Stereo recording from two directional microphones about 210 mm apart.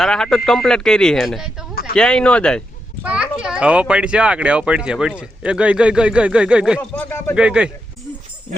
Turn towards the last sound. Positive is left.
turn(degrees=-5)  # may be behind; listen again after turning